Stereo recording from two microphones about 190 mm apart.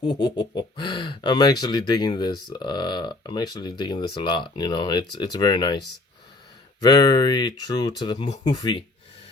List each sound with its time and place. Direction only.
0.0 s speech: 25° left (ahead or behind)
6.8 s speech: 20° left (ahead or behind)